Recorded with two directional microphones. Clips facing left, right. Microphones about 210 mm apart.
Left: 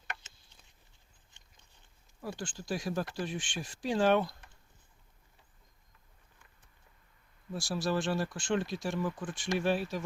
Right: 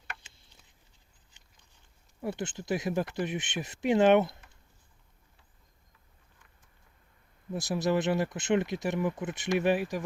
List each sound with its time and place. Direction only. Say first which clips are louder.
2.2 s speech: right 5 dB; 20° right (ahead or behind)
7.5 s speech: right 4 dB; 20° right (ahead or behind)